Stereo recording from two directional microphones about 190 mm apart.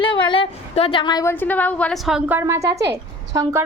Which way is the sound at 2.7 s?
65° right (ahead or behind).